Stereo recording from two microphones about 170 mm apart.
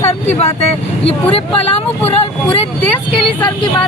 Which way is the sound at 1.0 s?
35° left (ahead or behind).